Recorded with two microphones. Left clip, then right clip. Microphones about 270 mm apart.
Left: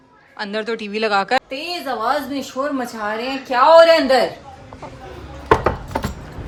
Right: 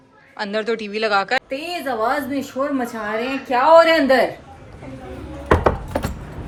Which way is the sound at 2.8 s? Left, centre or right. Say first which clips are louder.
Even; centre.